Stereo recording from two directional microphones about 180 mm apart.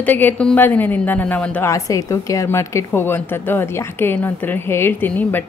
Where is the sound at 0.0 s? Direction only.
10° left (ahead or behind).